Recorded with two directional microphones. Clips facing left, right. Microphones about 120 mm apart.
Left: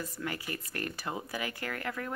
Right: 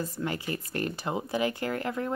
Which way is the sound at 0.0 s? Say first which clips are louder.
Right 5 dB; 25° right (ahead or behind).